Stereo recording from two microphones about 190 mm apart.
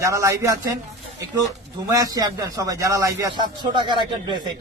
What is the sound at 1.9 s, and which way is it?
A man's voice, 20° right (ahead or behind).